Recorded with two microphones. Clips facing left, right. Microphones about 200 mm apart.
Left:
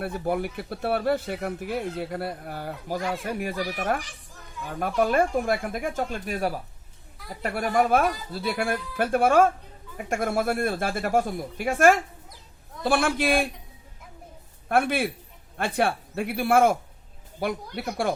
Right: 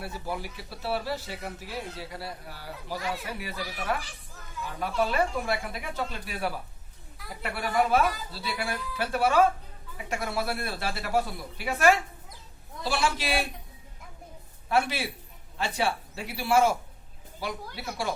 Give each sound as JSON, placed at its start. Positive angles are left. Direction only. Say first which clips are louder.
{"t": 0.0, "sound": "speech", "louder": "left 8 dB", "side_deg": 55}
{"t": 4.6, "sound": "speech", "louder": "left 4 dB", "side_deg": 50}
{"t": 14.7, "sound": "speech", "louder": "left 4 dB", "side_deg": 55}